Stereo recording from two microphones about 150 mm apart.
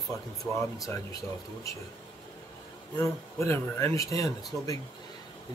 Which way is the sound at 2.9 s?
15° left (ahead or behind).